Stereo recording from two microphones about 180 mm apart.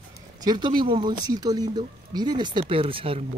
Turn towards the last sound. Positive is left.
turn(degrees=-30)  # may be behind; listen again after turning